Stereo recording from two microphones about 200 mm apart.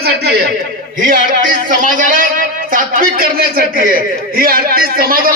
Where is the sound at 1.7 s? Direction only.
40° right (ahead or behind).